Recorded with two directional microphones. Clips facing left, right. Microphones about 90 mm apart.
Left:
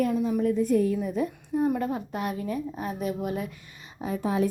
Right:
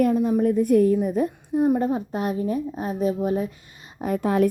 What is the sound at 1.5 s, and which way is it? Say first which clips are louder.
A woman's voice: right 5 dB; 20° right (ahead or behind).